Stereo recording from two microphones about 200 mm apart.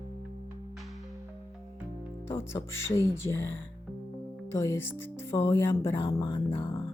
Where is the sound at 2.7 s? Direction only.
15° left (ahead or behind).